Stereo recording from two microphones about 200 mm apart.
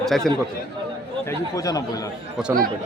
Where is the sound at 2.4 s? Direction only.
5° right (ahead or behind).